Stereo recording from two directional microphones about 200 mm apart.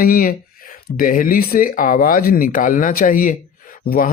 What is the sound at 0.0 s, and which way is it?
Speech, 45° left (ahead or behind).